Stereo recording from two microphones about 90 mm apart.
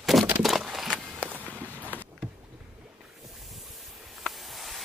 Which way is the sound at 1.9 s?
20° left (ahead or behind).